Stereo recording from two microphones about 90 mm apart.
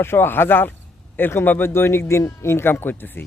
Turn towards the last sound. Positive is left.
turn(degrees=25)  # may be behind; listen again after turning